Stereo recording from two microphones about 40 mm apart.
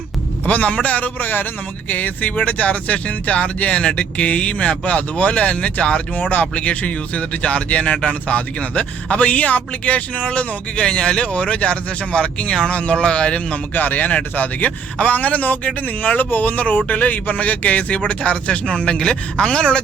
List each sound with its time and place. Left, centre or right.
0.4 s a man's voice: left
1.9 s speech: left
6.1 s speech: left
13.7 s a man's voice: left